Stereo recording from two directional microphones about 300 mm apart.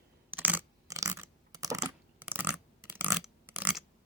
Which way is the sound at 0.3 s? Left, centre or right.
Centre.